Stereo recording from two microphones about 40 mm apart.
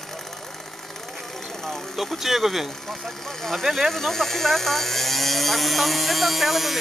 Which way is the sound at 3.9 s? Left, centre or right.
Centre.